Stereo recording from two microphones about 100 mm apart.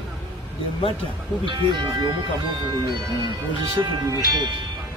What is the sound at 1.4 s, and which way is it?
Speech, 55° right (ahead or behind).